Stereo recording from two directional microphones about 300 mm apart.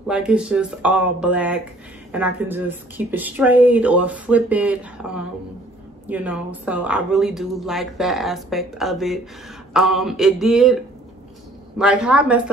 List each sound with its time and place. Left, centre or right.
0.0 s speech: centre
11.8 s speech: centre